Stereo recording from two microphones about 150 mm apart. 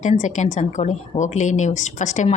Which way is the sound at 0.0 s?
55° left (ahead or behind).